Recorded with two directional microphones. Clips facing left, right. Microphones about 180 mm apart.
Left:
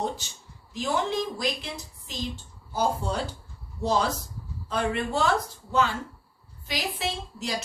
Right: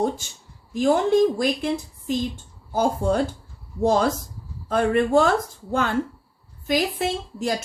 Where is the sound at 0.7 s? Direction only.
50° right (ahead or behind).